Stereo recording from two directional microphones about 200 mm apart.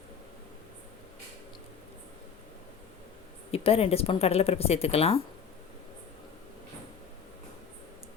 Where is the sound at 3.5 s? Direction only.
30° left (ahead or behind).